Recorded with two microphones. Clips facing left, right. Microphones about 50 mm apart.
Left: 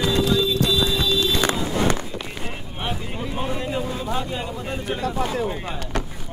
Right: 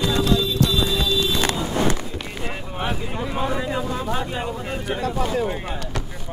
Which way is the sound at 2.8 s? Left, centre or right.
Right.